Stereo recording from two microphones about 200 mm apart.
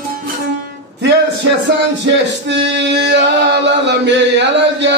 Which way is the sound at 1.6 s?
60° right (ahead or behind).